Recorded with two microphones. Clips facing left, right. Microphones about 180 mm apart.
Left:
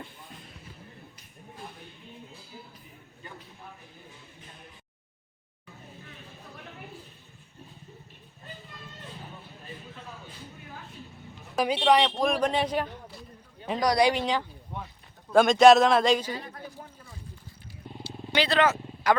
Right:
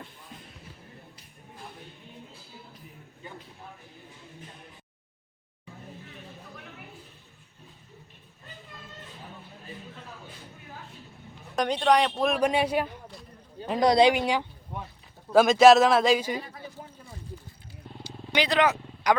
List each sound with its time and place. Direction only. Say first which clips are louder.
11.5 s speech: even; 5° left (ahead or behind)
13.7 s speech: right 4 dB; 20° right (ahead or behind)
14.1 s speech: right 2 dB; 10° right (ahead or behind)
16.4 s a sound: even; 5° right (ahead or behind)
18.0 s vehicle: even; 15° right (ahead or behind)